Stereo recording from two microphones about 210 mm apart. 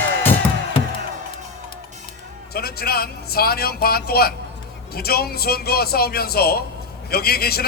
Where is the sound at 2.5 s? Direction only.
45° left (ahead or behind).